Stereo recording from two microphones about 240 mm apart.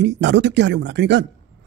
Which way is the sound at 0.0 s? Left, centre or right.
Right.